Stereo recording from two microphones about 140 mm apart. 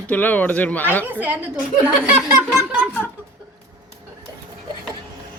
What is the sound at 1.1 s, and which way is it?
Speech, 10° right (ahead or behind).